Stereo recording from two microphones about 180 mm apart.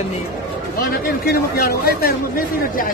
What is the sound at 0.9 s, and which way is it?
Speech, 55° left (ahead or behind).